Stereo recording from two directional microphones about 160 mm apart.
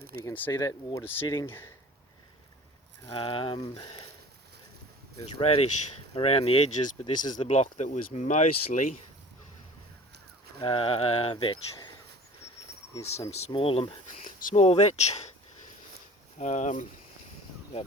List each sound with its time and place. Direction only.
0.3 s speech: 15° left (ahead or behind)
3.1 s speech: 35° left (ahead or behind)
5.2 s speech: 40° left (ahead or behind)
7.0 s speech: 25° left (ahead or behind)
7.3 s speech: 45° left (ahead or behind)
10.6 s speech: 35° left (ahead or behind)
13.5 s speech: 35° left (ahead or behind)
14.3 s cricket: 55° left (ahead or behind)
14.6 s speech: 40° left (ahead or behind)
16.4 s speech: 45° left (ahead or behind)